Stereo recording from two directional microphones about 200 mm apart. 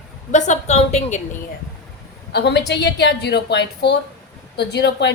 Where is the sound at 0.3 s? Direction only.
35° left (ahead or behind).